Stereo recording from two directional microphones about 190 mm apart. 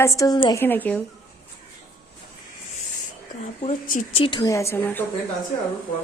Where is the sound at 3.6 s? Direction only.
40° left (ahead or behind).